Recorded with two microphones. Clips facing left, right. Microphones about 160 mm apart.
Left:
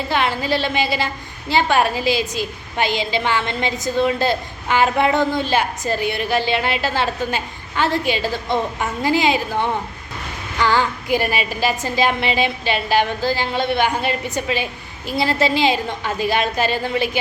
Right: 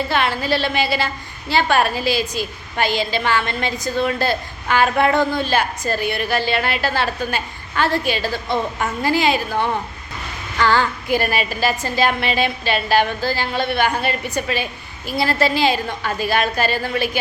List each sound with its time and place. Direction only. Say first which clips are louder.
0.1 s a woman's voice: even; 15° left (ahead or behind)